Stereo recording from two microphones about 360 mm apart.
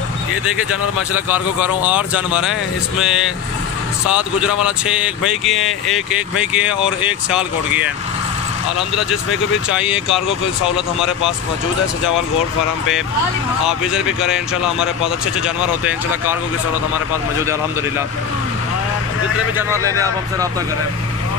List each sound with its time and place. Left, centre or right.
1.3 s speech: centre
4.1 s speech: centre
13.7 s speech: centre
19.5 s speech: left